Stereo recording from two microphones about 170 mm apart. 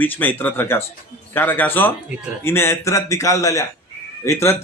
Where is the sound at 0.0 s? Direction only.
10° left (ahead or behind).